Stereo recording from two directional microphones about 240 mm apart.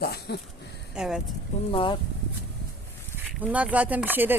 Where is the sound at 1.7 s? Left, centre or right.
Left.